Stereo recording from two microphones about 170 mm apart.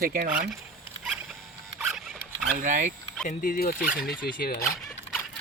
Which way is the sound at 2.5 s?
50° right (ahead or behind).